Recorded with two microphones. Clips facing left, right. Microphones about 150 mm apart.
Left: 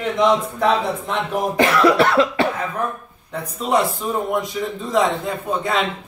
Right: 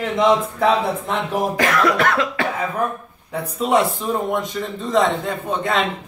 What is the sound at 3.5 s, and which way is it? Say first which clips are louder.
A man's voice: right 1 dB; centre (ahead or behind).